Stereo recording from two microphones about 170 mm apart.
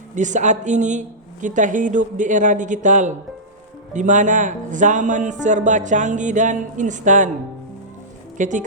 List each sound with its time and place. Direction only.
0.2 s a man's voice: 45° right (ahead or behind)
8.4 s a man's voice: 50° right (ahead or behind)